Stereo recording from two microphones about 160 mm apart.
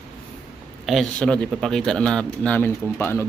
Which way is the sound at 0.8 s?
Centre (ahead or behind).